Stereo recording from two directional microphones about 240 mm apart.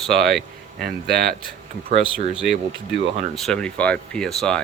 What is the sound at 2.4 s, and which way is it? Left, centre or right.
Speech, right.